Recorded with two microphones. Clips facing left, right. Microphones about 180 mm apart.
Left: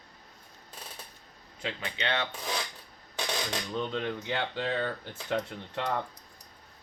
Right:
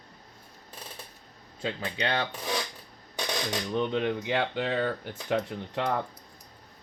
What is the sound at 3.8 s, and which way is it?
Speech, 20° right (ahead or behind).